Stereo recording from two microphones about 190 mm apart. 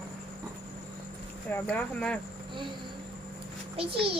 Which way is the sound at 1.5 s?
5° left (ahead or behind).